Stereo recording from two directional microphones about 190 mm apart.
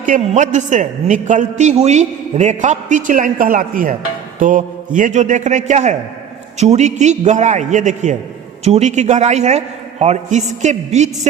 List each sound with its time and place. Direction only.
0.0 s a man's voice: 40° right (ahead or behind)
4.4 s mantra: 40° right (ahead or behind)
4.9 s a man's voice: 40° right (ahead or behind)